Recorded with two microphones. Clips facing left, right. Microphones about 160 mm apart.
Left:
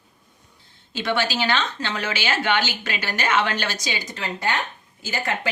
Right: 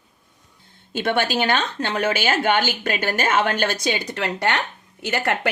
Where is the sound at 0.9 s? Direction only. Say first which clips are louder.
Right 3 dB; 55° right (ahead or behind).